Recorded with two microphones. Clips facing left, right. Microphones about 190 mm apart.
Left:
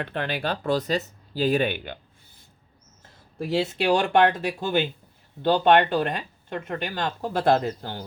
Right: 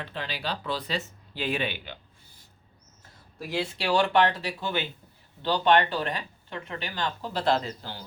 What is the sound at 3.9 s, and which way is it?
Speech, 50° left (ahead or behind).